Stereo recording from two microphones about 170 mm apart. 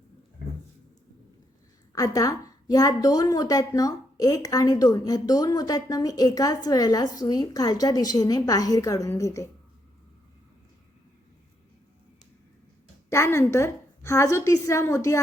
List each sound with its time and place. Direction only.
1.9 s a woman's voice: 20° left (ahead or behind)
13.1 s a woman's voice: 15° left (ahead or behind)